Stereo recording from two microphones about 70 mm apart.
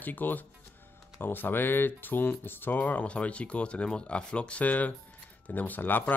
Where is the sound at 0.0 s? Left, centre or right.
Left.